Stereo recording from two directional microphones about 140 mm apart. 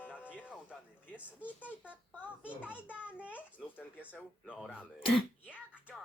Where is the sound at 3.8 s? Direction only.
15° left (ahead or behind).